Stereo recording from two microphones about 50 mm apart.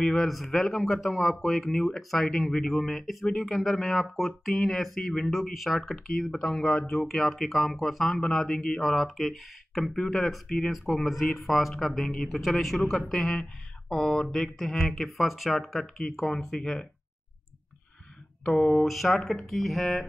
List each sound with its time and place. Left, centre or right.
0.0 s speech: centre
0.3 s speech: centre
18.4 s a sound: centre
18.8 s speech: centre